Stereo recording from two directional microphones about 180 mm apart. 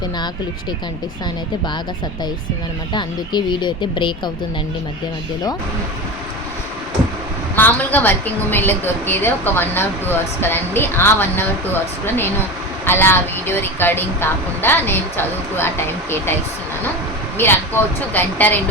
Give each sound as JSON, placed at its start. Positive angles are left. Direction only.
{"t": 2.9, "sound": "speech", "side_deg": 25}
{"t": 7.5, "sound": "a woman's voice", "side_deg": 10}
{"t": 17.3, "sound": "a woman's voice", "side_deg": 10}